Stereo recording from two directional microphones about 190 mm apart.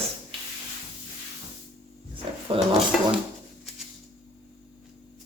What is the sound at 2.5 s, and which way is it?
Speech, 30° right (ahead or behind).